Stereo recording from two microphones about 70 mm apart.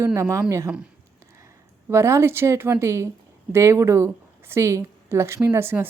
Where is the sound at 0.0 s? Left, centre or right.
Right.